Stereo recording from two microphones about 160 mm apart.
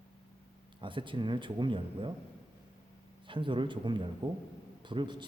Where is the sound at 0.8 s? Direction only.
30° right (ahead or behind).